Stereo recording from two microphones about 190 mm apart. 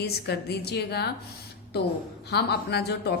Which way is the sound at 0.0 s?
60° left (ahead or behind).